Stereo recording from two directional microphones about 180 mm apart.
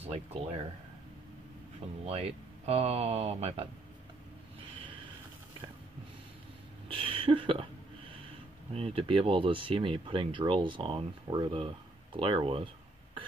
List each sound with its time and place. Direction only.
0.0 s speech: 35° right (ahead or behind)
2.0 s speech: 35° right (ahead or behind)
6.9 s a sound: 30° right (ahead or behind)
8.7 s speech: 30° right (ahead or behind)